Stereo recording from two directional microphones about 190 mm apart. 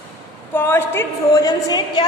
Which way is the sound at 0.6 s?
10° left (ahead or behind).